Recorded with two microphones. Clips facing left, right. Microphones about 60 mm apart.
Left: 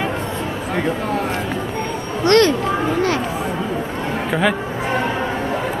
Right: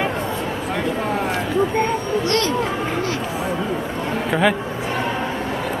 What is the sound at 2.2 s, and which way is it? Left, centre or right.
Speech, left.